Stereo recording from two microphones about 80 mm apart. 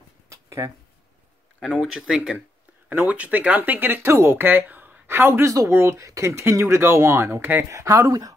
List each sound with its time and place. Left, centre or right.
0.3 s a sound: right
1.6 s speech: centre
2.9 s speech: right
5.9 s speech: right
7.7 s speech: right